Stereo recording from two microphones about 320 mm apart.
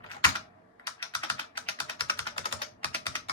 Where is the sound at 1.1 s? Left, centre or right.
Centre.